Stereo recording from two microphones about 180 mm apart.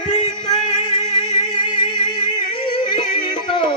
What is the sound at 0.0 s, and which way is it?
Music, 25° left (ahead or behind).